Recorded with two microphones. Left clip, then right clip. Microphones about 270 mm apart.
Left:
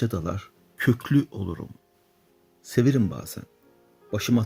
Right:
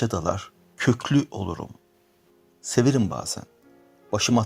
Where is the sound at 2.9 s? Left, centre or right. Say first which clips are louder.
Right 2 dB; right.